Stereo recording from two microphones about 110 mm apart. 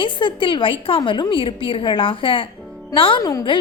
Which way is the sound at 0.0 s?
50° left (ahead or behind).